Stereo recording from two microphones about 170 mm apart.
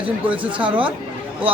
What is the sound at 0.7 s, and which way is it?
Speech, 30° right (ahead or behind).